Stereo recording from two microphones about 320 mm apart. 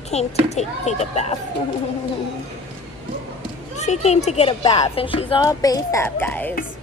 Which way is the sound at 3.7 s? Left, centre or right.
Left.